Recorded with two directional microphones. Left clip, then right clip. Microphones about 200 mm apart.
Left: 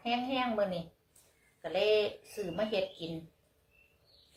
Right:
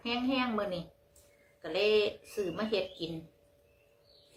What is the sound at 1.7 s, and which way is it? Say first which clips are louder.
Speech: right 1 dB; 15° right (ahead or behind).